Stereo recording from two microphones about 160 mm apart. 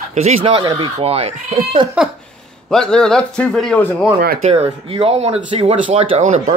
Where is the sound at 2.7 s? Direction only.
5° left (ahead or behind).